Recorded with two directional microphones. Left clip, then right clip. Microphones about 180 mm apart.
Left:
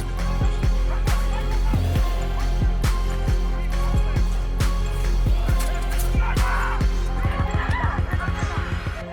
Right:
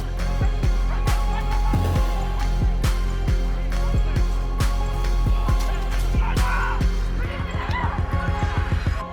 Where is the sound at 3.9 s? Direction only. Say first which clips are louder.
Even; centre (ahead or behind).